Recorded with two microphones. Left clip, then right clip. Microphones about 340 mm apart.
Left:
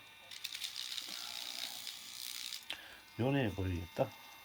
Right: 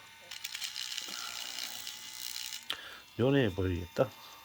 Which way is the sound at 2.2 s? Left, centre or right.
Centre.